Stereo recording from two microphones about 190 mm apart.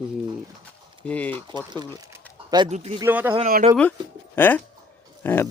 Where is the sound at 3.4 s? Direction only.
45° right (ahead or behind).